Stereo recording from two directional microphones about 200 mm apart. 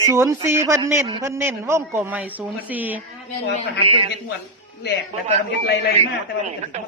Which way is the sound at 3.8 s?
25° right (ahead or behind).